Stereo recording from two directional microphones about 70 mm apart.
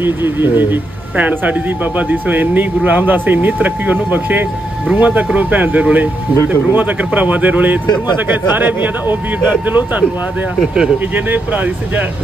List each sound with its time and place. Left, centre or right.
0.0 s speech: right
7.8 s speech: left
8.3 s speech: right